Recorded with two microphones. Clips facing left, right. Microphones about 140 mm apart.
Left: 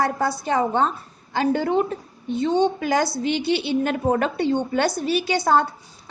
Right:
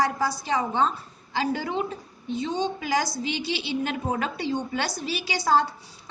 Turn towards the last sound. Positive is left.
turn(degrees=55)  # may be behind; listen again after turning